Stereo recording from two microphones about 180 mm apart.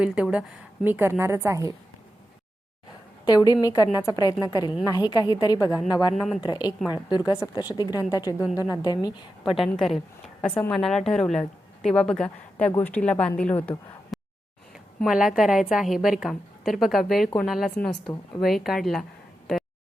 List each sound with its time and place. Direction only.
0.0 s a woman's voice: 5° right (ahead or behind)
3.2 s a woman's voice: 20° left (ahead or behind)
6.1 s a woman's voice: centre (ahead or behind)
6.4 s a woman's voice: 20° left (ahead or behind)
9.6 s a woman's voice: centre (ahead or behind)
15.0 s a woman's voice: 5° right (ahead or behind)